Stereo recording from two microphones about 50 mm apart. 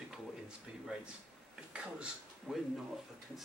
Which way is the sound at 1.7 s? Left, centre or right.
Right.